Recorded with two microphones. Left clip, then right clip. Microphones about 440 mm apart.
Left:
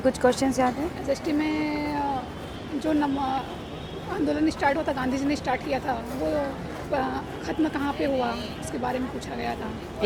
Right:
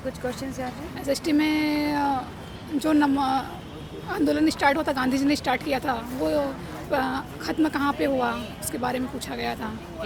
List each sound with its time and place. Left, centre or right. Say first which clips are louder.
0.1 s speech: left 8 dB; left
1.1 s a woman's voice: right 4 dB; right